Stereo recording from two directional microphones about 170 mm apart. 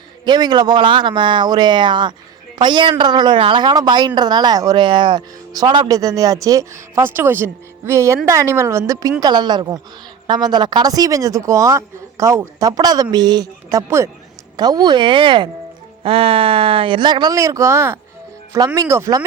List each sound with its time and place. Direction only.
0.3 s speech: 25° right (ahead or behind)